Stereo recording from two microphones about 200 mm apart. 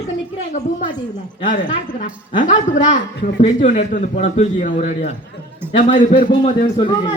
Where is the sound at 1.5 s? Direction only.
40° left (ahead or behind).